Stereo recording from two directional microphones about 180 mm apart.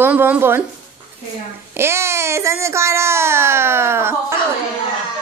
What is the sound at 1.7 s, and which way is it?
A child's voice, 15° right (ahead or behind).